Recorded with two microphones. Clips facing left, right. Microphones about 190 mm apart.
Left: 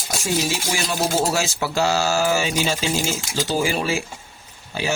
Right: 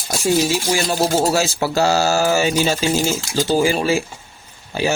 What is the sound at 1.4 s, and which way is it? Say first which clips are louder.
Speech: right 4 dB; 40° right (ahead or behind).